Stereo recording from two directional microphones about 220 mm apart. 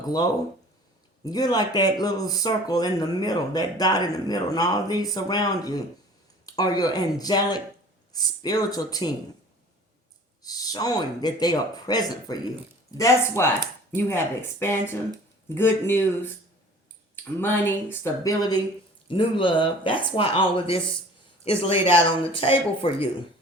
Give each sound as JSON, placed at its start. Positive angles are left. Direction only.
{"t": 0.0, "sound": "speech", "side_deg": 15}
{"t": 10.4, "sound": "speech", "side_deg": 15}
{"t": 15.5, "sound": "speech", "side_deg": 10}
{"t": 17.4, "sound": "speech", "side_deg": 10}